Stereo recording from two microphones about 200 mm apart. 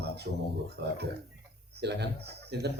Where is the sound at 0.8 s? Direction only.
60° right (ahead or behind).